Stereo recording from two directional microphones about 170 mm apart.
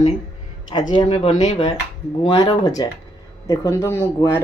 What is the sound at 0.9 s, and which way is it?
Speech, 30° left (ahead or behind).